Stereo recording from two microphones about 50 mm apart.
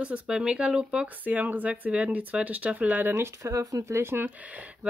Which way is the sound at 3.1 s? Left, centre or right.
Right.